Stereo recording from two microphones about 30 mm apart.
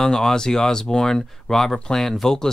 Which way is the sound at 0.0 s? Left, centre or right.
Centre.